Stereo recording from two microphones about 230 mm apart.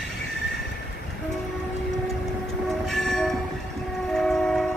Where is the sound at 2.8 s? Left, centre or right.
Centre.